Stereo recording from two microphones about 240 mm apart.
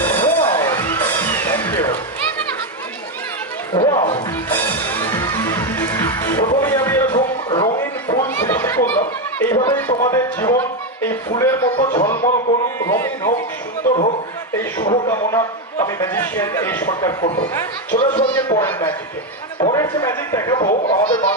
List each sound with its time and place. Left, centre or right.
0.1 s music: centre
3.7 s music: centre
7.2 s a sound: left
11.7 s speech: left
12.7 s a man's voice: centre
14.9 s a man's voice: centre